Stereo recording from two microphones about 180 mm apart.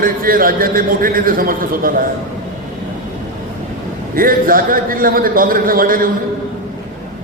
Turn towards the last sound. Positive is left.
turn(degrees=-50)  # may be behind; listen again after turning